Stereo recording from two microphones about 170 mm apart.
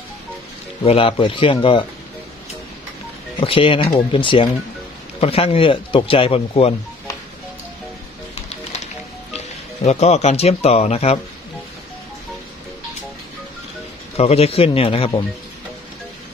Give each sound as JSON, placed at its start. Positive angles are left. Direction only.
{"t": 0.8, "sound": "speech", "side_deg": 35}
{"t": 3.3, "sound": "speech", "side_deg": 30}
{"t": 9.8, "sound": "speech", "side_deg": 40}
{"t": 14.1, "sound": "speech", "side_deg": 35}